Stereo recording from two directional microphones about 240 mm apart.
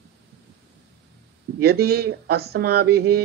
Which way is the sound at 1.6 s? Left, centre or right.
Right.